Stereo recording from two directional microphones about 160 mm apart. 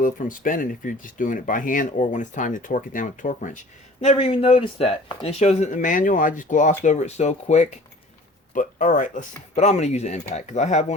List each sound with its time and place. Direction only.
0.0 s speech: 60° left (ahead or behind)
4.0 s speech: 40° left (ahead or behind)
8.5 s speech: 55° left (ahead or behind)